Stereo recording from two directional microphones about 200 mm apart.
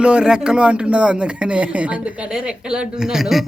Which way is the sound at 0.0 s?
5° right (ahead or behind).